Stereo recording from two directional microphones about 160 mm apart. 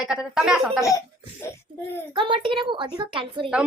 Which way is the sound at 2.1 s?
30° right (ahead or behind).